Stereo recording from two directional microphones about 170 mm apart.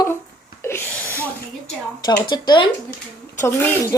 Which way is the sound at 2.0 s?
25° left (ahead or behind).